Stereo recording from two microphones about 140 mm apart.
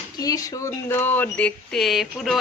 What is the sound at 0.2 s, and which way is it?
Speech, 25° left (ahead or behind).